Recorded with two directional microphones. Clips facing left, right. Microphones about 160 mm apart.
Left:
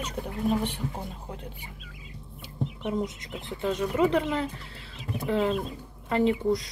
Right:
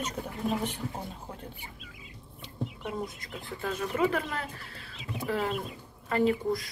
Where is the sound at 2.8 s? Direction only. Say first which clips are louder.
Left 8 dB; 20° left (ahead or behind).